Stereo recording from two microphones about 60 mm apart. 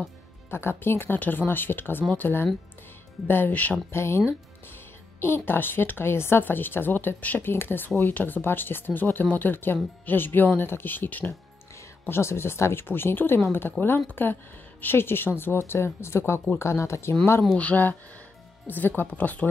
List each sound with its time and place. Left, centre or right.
0.5 s speech: left
3.9 s speech: left
5.2 s speech: left
12.1 s speech: left
12.8 s speech: left
17.6 s speech: left